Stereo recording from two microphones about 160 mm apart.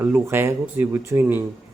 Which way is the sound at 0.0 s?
15° right (ahead or behind).